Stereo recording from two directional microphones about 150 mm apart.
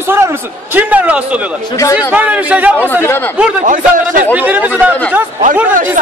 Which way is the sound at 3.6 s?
60° right (ahead or behind).